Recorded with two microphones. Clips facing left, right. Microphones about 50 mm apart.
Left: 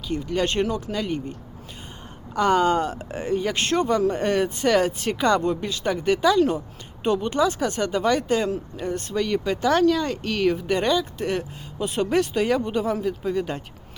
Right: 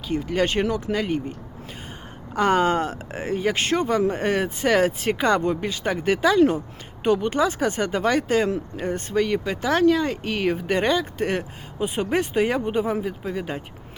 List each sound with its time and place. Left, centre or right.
0.2 s speech: right
2.3 s speech: right
8.4 s speech: right